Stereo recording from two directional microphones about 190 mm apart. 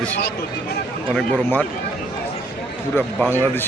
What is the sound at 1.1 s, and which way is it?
Speech, 5° left (ahead or behind).